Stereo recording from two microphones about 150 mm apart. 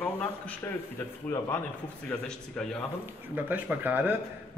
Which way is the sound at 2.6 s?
5° left (ahead or behind).